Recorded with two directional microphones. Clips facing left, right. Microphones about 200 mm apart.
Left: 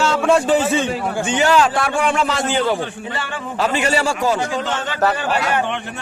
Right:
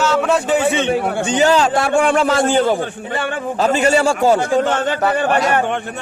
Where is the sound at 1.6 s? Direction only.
25° right (ahead or behind).